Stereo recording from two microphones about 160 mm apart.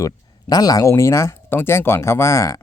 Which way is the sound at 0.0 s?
25° left (ahead or behind).